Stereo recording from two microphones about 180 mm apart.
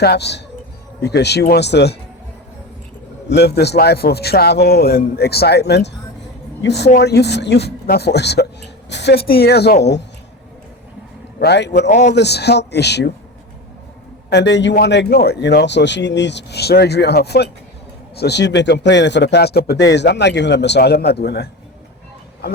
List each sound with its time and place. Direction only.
0.0 s speech: 65° left (ahead or behind)
3.2 s a man's voice: 65° left (ahead or behind)
11.3 s speech: 70° left (ahead or behind)
11.9 s a man's voice: 40° left (ahead or behind)
12.1 s speech: 70° left (ahead or behind)
14.3 s speech: 75° left (ahead or behind)